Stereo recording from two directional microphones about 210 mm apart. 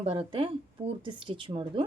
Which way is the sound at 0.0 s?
25° right (ahead or behind).